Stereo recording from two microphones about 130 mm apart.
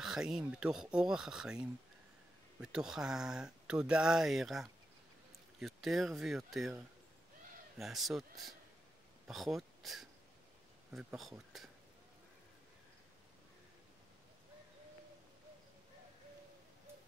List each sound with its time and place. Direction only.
0.0 s speech: 5° right (ahead or behind)
11.1 s speech: centre (ahead or behind)